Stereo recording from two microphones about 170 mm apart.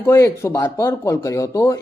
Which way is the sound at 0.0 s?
15° left (ahead or behind).